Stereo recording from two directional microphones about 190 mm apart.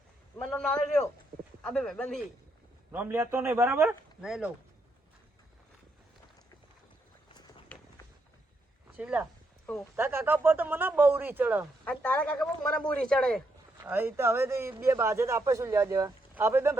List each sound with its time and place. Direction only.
0.3 s speech: 5° left (ahead or behind)
2.9 s a man's voice: 10° right (ahead or behind)
7.7 s run: 10° left (ahead or behind)
9.0 s a man's voice: 5° right (ahead or behind)
11.9 s speech: 5° left (ahead or behind)
13.8 s a man's voice: 10° right (ahead or behind)